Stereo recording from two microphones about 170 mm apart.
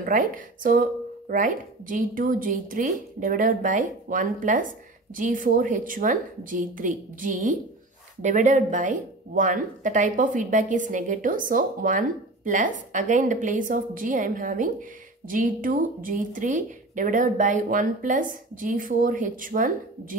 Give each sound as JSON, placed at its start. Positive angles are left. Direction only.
{"t": 0.0, "sound": "speech", "side_deg": -55}